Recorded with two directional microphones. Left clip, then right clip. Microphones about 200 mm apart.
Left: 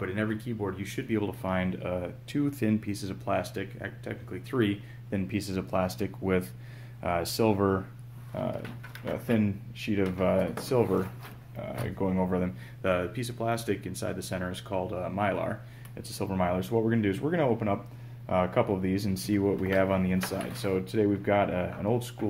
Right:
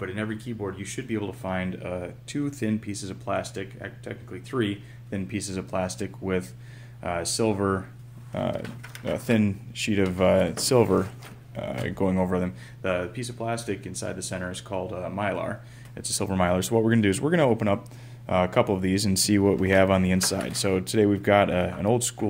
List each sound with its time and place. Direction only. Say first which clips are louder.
0.0 s speech: even; centre (ahead or behind)
8.4 s speech: right 5 dB; 45° right (ahead or behind)
12.3 s speech: right 3 dB; 20° right (ahead or behind)
12.8 s speech: right 1 dB; centre (ahead or behind)
15.9 s speech: right 5 dB; 30° right (ahead or behind)
18.2 s speech: right 4 dB; 35° right (ahead or behind)